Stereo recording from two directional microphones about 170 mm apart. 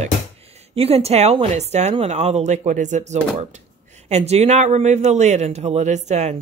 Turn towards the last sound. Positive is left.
turn(degrees=-40)  # may be behind; listen again after turning